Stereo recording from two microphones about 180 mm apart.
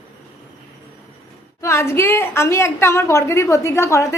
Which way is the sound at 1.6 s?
15° left (ahead or behind).